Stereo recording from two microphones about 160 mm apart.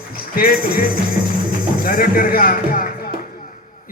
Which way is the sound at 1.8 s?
60° left (ahead or behind).